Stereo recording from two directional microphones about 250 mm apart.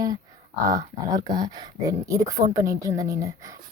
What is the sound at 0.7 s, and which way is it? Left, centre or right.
Speech, centre.